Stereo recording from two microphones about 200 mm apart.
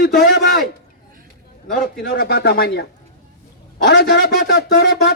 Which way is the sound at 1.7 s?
55° left (ahead or behind).